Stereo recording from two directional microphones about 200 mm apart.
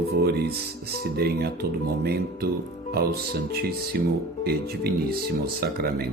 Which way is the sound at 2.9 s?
50° right (ahead or behind).